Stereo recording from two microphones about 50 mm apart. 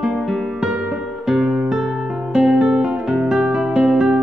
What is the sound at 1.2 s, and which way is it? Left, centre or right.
Guitar, centre.